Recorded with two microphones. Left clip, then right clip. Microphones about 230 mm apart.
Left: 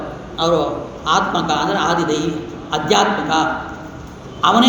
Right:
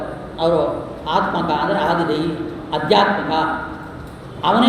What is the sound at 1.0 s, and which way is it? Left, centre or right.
A man's voice, left.